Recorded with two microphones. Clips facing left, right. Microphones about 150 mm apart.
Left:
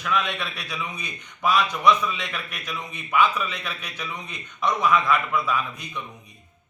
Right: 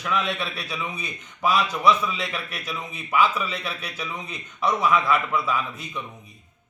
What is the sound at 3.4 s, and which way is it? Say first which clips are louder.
A man's voice: right 2 dB; 30° right (ahead or behind).